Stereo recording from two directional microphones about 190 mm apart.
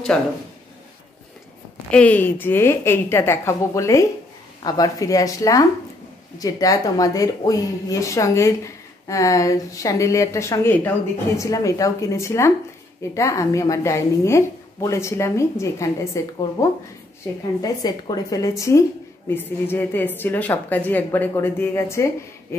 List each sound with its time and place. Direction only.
0.1 s a woman's voice: 5° left (ahead or behind)
1.9 s a woman's voice: 5° left (ahead or behind)